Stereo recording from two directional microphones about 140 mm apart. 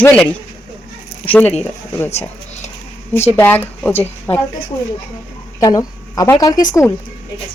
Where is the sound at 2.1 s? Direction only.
50° left (ahead or behind).